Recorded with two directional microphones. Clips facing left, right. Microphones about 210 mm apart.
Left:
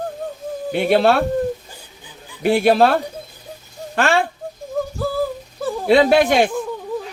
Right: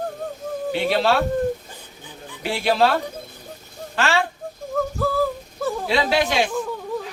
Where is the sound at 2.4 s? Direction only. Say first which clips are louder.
Left 6 dB; 55° left (ahead or behind).